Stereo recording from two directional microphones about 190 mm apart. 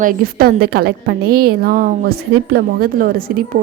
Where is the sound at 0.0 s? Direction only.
50° right (ahead or behind).